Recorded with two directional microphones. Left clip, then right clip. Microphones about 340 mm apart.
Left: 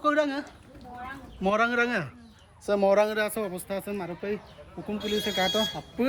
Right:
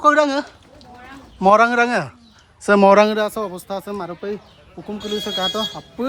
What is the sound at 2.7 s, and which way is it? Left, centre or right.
Speech, right.